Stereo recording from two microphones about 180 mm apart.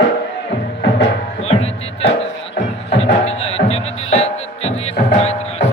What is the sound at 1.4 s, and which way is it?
Music, 35° left (ahead or behind).